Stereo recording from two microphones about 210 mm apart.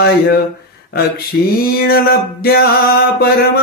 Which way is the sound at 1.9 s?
45° left (ahead or behind).